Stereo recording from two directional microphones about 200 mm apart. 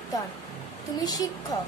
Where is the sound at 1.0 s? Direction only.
20° left (ahead or behind).